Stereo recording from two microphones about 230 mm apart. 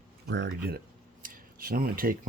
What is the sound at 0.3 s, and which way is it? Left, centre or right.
Speech, right.